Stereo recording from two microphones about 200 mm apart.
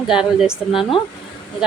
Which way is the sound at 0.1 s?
5° right (ahead or behind).